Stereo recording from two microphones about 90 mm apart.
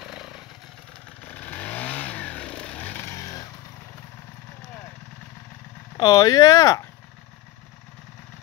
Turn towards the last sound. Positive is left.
turn(degrees=40)  # may be behind; listen again after turning